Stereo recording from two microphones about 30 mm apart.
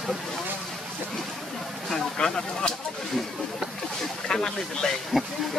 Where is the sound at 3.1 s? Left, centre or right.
Centre.